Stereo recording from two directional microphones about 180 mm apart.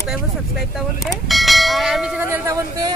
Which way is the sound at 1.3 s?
Centre (ahead or behind).